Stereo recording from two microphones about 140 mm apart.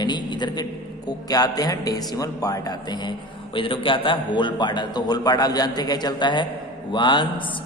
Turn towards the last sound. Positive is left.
turn(degrees=35)  # may be behind; listen again after turning